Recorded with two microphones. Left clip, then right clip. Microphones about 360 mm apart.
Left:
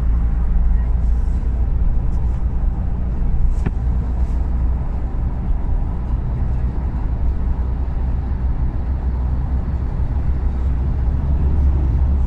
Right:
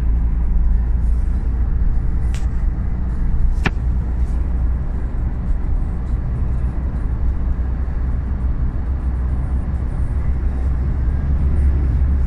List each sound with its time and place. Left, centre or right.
3.6 s vehicle: right